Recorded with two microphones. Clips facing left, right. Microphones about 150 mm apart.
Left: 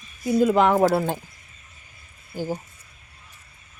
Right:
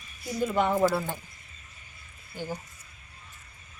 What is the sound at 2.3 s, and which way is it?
Speech, 40° left (ahead or behind).